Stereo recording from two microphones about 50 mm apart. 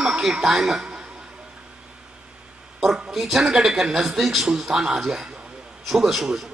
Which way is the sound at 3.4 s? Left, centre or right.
Centre.